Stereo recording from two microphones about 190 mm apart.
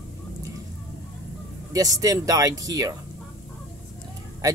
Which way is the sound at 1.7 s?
20° right (ahead or behind).